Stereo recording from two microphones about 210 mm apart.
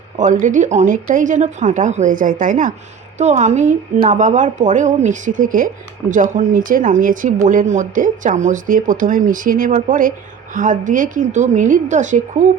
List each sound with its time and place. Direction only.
0.2 s a woman's voice: 35° right (ahead or behind)